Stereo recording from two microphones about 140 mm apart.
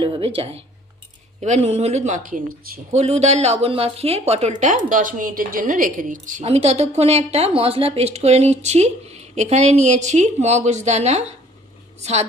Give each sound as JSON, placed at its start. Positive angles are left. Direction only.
{"t": 0.0, "sound": "a woman's voice", "side_deg": -40}
{"t": 2.9, "sound": "speech", "side_deg": -50}
{"t": 6.5, "sound": "a woman's voice", "side_deg": -50}